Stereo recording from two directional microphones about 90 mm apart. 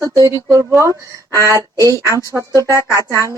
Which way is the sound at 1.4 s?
35° right (ahead or behind).